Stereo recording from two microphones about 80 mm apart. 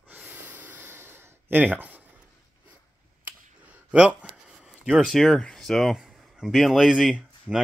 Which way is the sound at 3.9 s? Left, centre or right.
Centre.